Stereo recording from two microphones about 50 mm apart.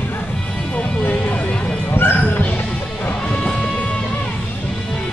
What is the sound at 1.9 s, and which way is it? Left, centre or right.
Bow-wow, left.